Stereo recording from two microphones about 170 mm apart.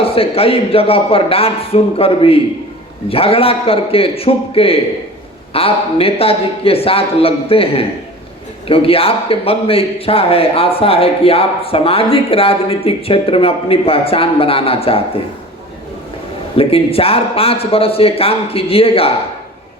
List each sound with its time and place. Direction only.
0.0 s a man's voice: 35° left (ahead or behind)
16.6 s a man's voice: 35° left (ahead or behind)